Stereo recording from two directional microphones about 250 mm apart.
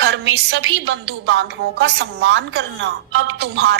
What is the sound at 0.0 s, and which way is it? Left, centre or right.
A woman's voice, right.